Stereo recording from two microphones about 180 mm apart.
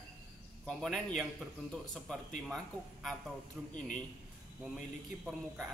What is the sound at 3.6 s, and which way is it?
Speech, 10° right (ahead or behind).